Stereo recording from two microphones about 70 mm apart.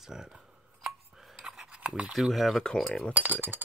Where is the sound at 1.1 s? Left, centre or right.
Centre.